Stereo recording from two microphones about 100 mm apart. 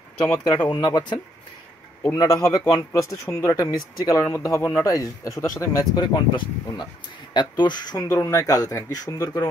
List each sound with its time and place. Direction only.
0.7 s speech: 45° left (ahead or behind)
2.1 s speech: 35° left (ahead or behind)
5.9 s speech: 45° left (ahead or behind)